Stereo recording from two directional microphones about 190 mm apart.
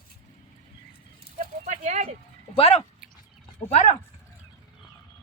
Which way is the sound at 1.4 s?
40° right (ahead or behind).